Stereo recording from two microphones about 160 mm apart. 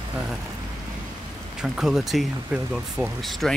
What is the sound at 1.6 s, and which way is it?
Speech, 5° right (ahead or behind).